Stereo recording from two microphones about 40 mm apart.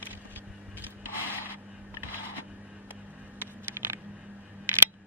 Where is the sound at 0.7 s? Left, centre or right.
Right.